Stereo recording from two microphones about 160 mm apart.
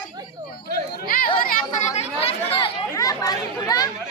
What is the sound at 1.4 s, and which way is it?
Chatter, 60° left (ahead or behind).